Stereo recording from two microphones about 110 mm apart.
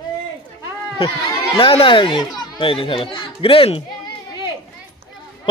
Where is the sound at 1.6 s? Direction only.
55° left (ahead or behind).